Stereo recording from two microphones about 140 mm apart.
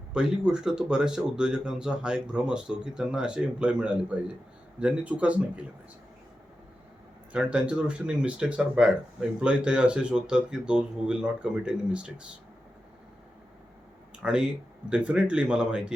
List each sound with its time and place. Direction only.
0.1 s speech: 5° right (ahead or behind)
7.3 s speech: 10° right (ahead or behind)
14.2 s speech: 5° right (ahead or behind)